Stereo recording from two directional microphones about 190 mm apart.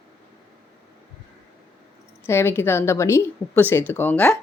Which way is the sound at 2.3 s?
15° left (ahead or behind).